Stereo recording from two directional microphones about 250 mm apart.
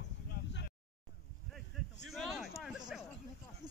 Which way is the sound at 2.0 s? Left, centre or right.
Centre.